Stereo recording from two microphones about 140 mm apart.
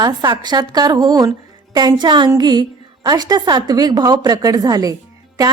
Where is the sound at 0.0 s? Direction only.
30° right (ahead or behind).